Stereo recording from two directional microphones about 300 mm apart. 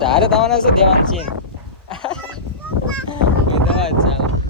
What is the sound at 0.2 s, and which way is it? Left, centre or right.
Speech, centre.